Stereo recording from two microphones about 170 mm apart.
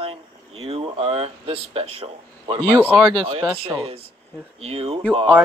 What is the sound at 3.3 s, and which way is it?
Speech, 35° right (ahead or behind).